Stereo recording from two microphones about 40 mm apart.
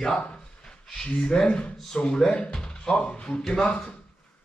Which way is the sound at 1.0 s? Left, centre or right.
Left.